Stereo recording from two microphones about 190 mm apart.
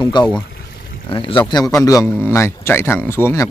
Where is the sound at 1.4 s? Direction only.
15° left (ahead or behind).